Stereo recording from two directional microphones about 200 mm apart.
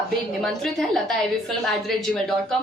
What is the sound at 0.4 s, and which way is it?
A woman's voice, centre (ahead or behind).